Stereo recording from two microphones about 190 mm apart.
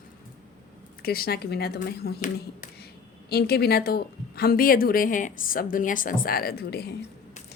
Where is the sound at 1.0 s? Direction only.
55° left (ahead or behind).